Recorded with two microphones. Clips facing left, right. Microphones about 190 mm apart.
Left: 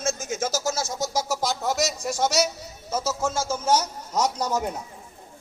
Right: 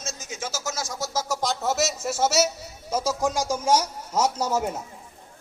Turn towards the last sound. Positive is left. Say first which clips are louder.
# right 1 dB
turn(degrees=-5)  # may be behind; listen again after turning